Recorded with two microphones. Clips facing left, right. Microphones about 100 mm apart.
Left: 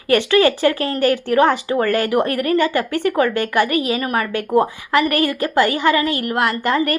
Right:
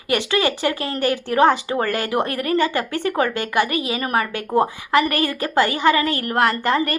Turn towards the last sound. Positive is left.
turn(degrees=-30)  # may be behind; listen again after turning